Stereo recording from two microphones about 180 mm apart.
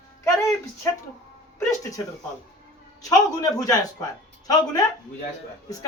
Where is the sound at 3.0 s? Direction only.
20° left (ahead or behind).